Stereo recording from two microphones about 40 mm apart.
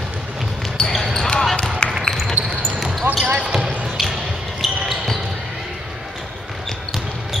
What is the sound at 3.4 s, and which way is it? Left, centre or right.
Basketball bounce, centre.